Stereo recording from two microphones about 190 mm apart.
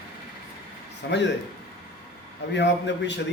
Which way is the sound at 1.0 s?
60° left (ahead or behind).